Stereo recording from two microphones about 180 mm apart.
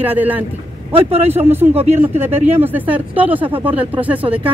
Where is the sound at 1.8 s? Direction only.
35° right (ahead or behind).